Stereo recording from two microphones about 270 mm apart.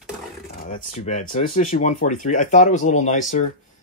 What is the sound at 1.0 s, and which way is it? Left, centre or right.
Speech, left.